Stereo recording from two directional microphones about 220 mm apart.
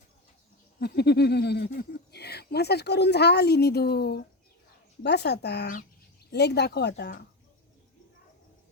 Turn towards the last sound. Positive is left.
turn(degrees=50)  # may be behind; listen again after turning